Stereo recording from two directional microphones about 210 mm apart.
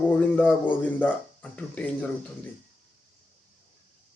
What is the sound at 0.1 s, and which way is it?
Speech, 5° left (ahead or behind).